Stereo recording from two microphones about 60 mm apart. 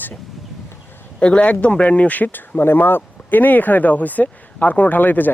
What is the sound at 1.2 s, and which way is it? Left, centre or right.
Speech, centre.